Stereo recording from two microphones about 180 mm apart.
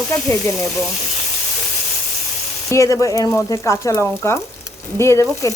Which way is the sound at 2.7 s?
15° left (ahead or behind).